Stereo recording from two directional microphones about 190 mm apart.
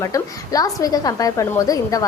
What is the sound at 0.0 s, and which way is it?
A woman's voice, 20° left (ahead or behind).